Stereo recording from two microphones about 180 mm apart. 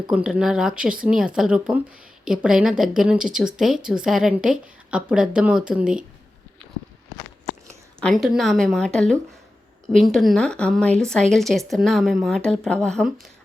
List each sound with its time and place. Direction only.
0.1 s a woman's voice: 5° right (ahead or behind)
7.9 s a woman's voice: centre (ahead or behind)